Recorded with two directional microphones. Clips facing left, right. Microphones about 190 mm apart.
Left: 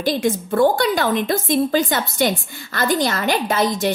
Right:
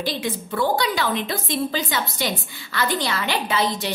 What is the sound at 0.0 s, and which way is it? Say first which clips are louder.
A woman's voice: left 7 dB; 45° left (ahead or behind).